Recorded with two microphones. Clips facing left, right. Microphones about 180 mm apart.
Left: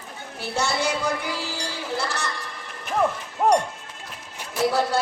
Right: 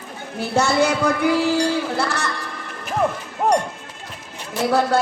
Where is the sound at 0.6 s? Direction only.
55° right (ahead or behind).